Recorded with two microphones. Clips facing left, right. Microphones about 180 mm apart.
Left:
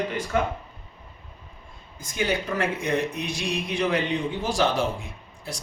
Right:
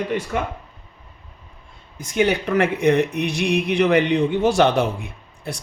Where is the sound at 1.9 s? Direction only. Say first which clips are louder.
Right 7 dB; 70° right (ahead or behind).